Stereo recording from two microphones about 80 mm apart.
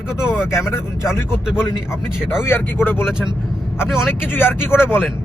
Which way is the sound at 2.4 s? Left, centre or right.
Left.